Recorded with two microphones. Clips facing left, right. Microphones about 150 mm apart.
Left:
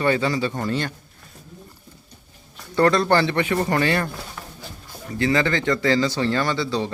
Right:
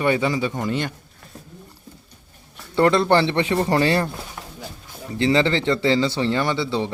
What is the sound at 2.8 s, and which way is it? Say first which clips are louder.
Speech: right 1 dB; 20° right (ahead or behind).